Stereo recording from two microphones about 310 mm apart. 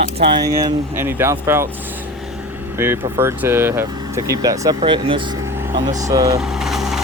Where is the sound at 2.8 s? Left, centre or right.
Centre.